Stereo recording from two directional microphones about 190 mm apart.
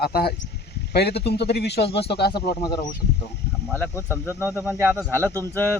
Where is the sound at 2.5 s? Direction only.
20° left (ahead or behind).